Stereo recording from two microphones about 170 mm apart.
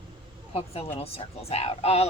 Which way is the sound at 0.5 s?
35° left (ahead or behind).